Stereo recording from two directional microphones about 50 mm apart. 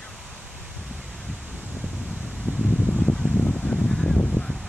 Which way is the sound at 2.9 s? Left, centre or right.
Centre.